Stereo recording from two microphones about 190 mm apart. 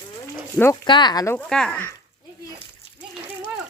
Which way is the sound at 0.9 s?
25° left (ahead or behind).